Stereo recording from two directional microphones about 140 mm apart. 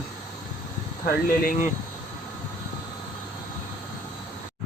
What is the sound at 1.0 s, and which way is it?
Speech, 90° left.